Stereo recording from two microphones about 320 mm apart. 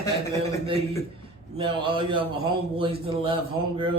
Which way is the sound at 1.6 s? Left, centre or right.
Centre.